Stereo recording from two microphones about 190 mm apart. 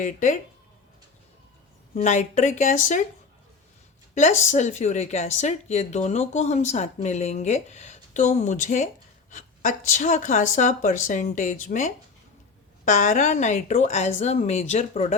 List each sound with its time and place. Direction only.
0.0 s speech: 40° left (ahead or behind)
2.0 s speech: 40° left (ahead or behind)
4.1 s speech: 40° left (ahead or behind)